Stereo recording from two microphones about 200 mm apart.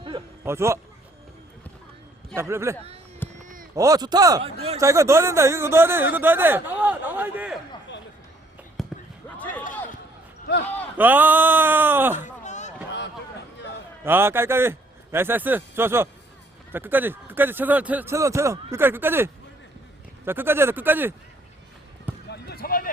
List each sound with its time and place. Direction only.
0.4 s speech: 15° right (ahead or behind)
2.3 s speech: 15° right (ahead or behind)
3.2 s run: 10° left (ahead or behind)
3.8 s speech: 15° right (ahead or behind)
8.8 s basketball bounce: centre (ahead or behind)
10.9 s speech: 10° right (ahead or behind)
12.2 s a sound: 35° left (ahead or behind)
13.6 s a sound: 60° left (ahead or behind)
14.0 s a man's voice: 10° right (ahead or behind)
22.3 s basketball bounce: 50° left (ahead or behind)